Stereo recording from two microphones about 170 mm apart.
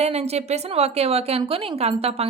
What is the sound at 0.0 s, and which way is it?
A woman's voice, 40° right (ahead or behind).